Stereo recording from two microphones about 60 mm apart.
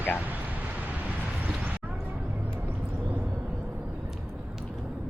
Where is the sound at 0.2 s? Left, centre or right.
Right.